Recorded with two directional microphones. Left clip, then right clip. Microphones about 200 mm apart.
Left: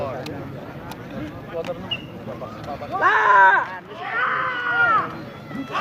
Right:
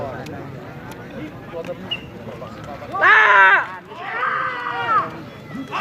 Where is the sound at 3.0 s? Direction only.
35° right (ahead or behind).